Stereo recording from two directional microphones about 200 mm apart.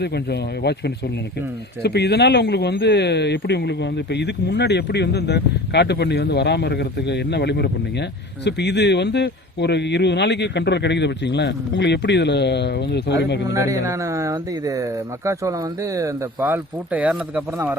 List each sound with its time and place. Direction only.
0.0 s speech: 55° left (ahead or behind)
13.5 s speech: 15° right (ahead or behind)